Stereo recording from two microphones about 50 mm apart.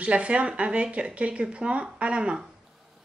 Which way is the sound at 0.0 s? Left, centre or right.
Right.